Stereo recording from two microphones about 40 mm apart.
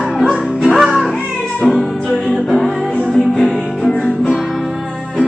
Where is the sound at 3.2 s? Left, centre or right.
Centre.